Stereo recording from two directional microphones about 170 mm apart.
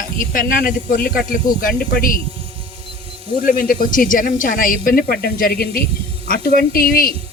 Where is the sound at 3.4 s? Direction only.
55° left (ahead or behind).